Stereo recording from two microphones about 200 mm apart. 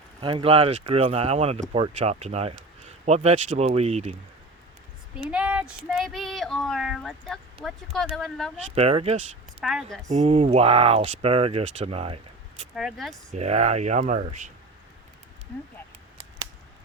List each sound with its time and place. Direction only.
0.2 s speech: 25° right (ahead or behind)
5.3 s speech: 5° right (ahead or behind)
8.7 s speech: 30° right (ahead or behind)
9.6 s speech: centre (ahead or behind)
10.1 s speech: 35° right (ahead or behind)
12.7 s speech: centre (ahead or behind)
13.3 s speech: 35° right (ahead or behind)